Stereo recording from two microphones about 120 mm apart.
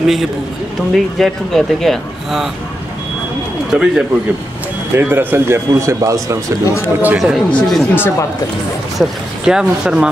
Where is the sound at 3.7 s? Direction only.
5° right (ahead or behind).